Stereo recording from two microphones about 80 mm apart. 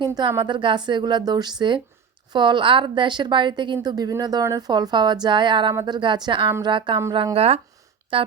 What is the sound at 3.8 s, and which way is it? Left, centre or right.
A woman's voice, right.